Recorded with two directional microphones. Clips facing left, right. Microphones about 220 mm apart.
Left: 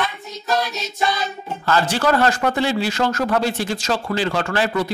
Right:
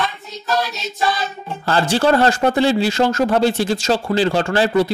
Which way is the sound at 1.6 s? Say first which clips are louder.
Right 3 dB; 30° right (ahead or behind).